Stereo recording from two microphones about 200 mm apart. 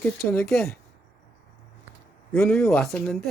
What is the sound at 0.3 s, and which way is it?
Speech, 5° left (ahead or behind).